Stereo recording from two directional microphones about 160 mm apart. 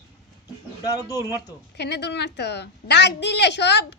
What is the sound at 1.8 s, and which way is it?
A woman's voice, 90° left.